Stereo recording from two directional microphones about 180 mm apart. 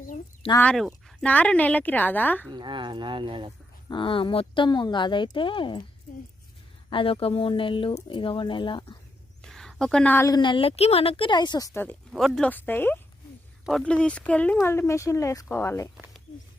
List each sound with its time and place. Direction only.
0.5 s a woman's voice: 5° left (ahead or behind)
2.5 s speech: 25° right (ahead or behind)
3.8 s speech: 30° left (ahead or behind)
6.9 s speech: 30° left (ahead or behind)
9.4 s a woman's voice: centre (ahead or behind)